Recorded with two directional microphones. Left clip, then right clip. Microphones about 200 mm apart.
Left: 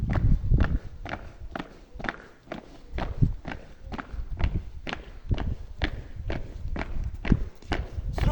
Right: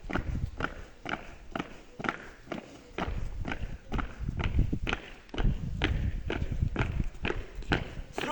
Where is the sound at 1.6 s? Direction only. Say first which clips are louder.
Even; 5° left (ahead or behind).